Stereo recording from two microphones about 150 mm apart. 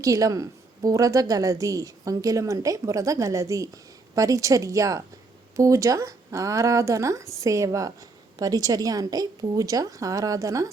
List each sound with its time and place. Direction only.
0.0 s a woman's voice: 20° right (ahead or behind)